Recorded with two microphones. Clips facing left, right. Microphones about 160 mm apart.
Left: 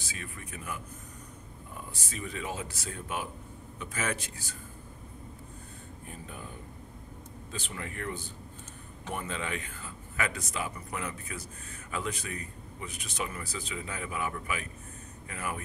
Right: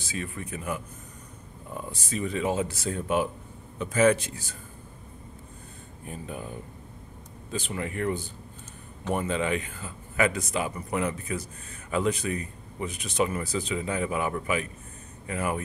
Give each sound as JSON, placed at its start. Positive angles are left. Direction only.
{"t": 0.0, "sound": "speech", "side_deg": -25}
{"t": 1.9, "sound": "speech", "side_deg": -25}
{"t": 7.5, "sound": "speech", "side_deg": -15}